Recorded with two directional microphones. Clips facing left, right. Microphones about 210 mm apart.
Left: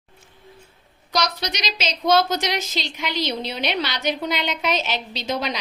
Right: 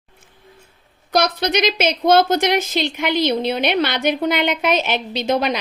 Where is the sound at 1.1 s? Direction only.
55° right (ahead or behind).